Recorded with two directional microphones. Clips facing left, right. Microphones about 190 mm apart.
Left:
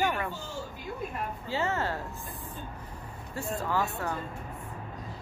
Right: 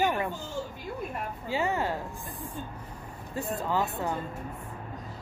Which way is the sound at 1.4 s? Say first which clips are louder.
Right 2 dB; 15° right (ahead or behind).